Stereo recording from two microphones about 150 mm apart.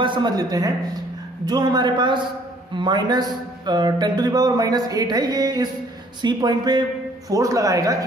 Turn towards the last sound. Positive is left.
turn(degrees=-20)  # may be behind; listen again after turning